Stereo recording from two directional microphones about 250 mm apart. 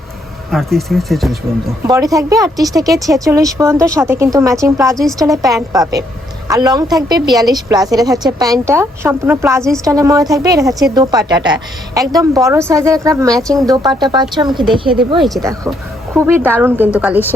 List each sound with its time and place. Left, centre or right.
0.5 s speech: centre
1.9 s a woman's voice: centre